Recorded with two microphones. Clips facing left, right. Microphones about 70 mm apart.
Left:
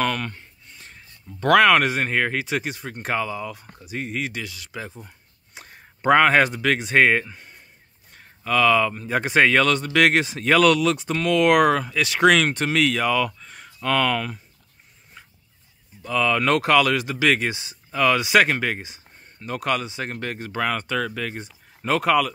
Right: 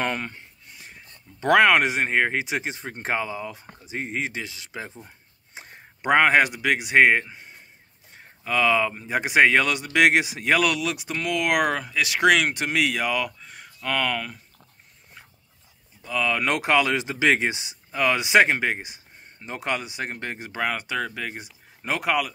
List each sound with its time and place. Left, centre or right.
0.0 s speech: right
1.4 s speech: centre
16.0 s speech: centre